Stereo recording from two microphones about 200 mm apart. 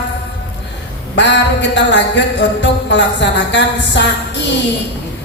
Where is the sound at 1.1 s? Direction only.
65° left (ahead or behind).